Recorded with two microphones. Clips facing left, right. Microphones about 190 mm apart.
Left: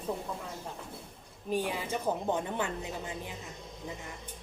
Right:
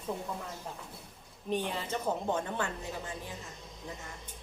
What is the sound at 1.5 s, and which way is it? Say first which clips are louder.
A woman's voice: left 1 dB; 10° left (ahead or behind).